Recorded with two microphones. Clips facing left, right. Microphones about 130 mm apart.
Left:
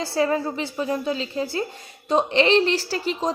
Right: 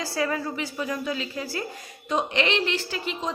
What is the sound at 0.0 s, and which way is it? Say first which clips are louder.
A woman's voice: left 5 dB; 25° left (ahead or behind).